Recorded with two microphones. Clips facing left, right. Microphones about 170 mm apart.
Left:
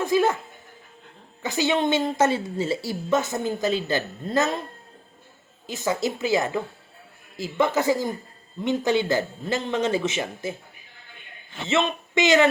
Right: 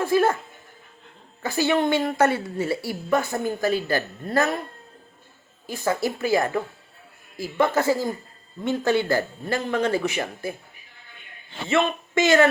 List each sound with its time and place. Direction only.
0.0 s music: 15° left (ahead or behind)
1.4 s a woman's voice: 20° left (ahead or behind)
5.6 s a woman's voice: 20° left (ahead or behind)
11.7 s a woman's voice: 20° left (ahead or behind)